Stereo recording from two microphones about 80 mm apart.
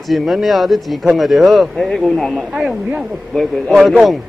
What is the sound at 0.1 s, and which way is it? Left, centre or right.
A man's voice, centre.